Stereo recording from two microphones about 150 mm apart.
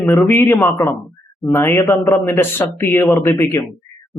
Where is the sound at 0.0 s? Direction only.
15° left (ahead or behind).